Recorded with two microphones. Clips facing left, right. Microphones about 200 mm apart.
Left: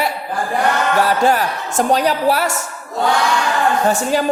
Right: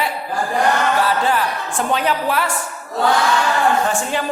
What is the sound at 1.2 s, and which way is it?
A woman's voice, 40° left (ahead or behind).